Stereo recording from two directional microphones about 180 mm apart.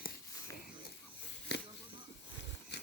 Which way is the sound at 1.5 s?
65° left (ahead or behind).